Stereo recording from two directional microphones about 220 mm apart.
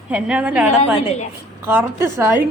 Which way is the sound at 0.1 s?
5° right (ahead or behind).